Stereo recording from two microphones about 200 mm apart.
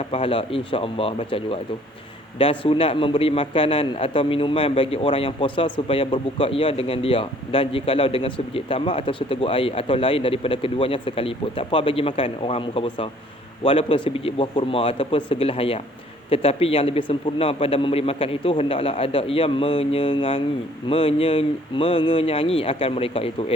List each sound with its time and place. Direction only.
0.0 s a man's voice: 30° left (ahead or behind)